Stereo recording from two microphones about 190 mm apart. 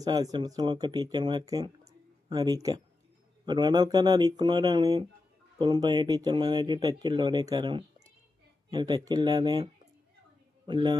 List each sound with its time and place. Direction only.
0.0 s speech: 20° right (ahead or behind)
10.7 s speech: 25° right (ahead or behind)